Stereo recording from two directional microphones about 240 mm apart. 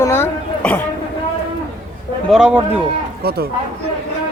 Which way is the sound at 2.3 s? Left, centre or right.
Centre.